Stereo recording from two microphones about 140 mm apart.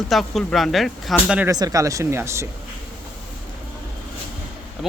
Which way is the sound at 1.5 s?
25° right (ahead or behind).